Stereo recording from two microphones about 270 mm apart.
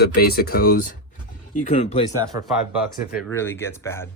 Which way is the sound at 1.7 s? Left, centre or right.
Left.